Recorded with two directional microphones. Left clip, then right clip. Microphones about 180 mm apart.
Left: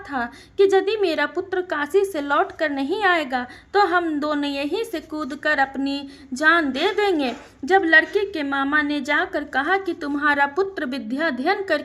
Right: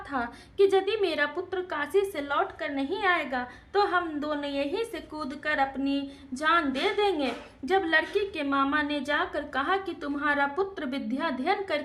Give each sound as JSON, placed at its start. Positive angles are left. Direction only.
{"t": 0.1, "sound": "a woman's voice", "side_deg": 20}